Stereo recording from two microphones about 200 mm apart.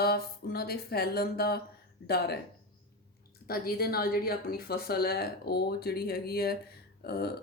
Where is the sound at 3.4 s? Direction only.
50° left (ahead or behind).